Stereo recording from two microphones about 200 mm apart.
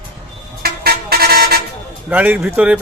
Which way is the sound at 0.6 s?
50° right (ahead or behind).